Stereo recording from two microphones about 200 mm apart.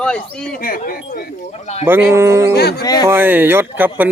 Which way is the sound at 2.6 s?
50° left (ahead or behind).